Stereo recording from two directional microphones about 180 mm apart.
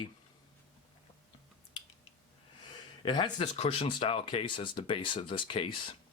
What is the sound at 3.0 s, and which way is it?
Speech, 25° left (ahead or behind).